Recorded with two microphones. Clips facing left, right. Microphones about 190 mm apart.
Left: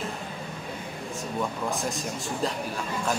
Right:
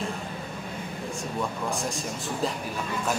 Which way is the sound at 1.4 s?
Centre (ahead or behind).